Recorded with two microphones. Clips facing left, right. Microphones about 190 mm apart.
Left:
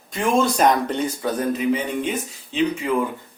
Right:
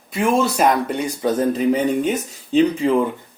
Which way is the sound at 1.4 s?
40° right (ahead or behind).